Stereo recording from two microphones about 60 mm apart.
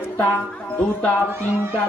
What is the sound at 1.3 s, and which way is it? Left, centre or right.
Music, right.